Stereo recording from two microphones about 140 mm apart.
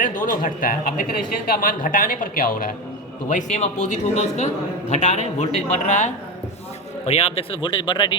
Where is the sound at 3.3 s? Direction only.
60° left (ahead or behind).